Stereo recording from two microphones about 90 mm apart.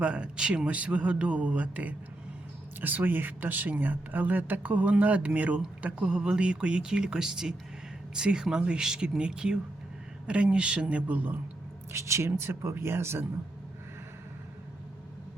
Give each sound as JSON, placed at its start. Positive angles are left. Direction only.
{"t": 0.0, "sound": "speech", "side_deg": -10}
{"t": 11.9, "sound": "speech", "side_deg": -30}